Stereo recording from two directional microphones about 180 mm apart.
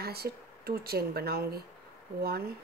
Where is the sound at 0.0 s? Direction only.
60° right (ahead or behind).